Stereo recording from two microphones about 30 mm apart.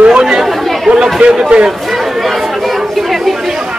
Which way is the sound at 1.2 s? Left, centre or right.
Right.